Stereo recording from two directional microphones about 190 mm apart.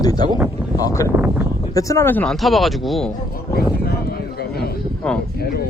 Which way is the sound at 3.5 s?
55° left (ahead or behind).